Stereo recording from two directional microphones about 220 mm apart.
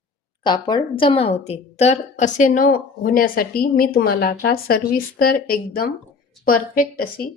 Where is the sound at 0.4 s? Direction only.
20° left (ahead or behind).